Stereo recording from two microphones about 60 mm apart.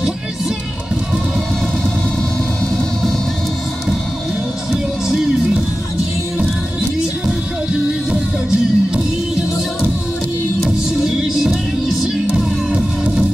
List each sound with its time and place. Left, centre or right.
8.1 s music: centre
10.6 s music: centre